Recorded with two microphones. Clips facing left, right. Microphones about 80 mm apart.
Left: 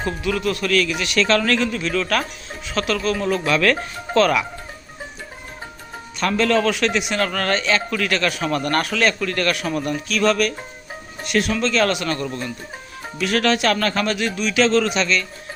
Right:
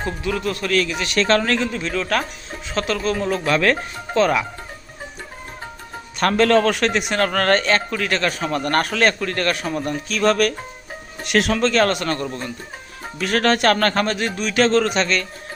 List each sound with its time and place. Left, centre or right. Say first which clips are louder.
0.2 s speech: left 2 dB; right
4.1 s speech: left 1 dB; centre
6.1 s a man's voice: right 3 dB; right
7.9 s a man's voice: even; right
8.7 s a man's voice: right 4 dB; right
11.3 s speech: right 2 dB; right
11.8 s a man's voice: right 1 dB; right
13.1 s a man's voice: right 1 dB; right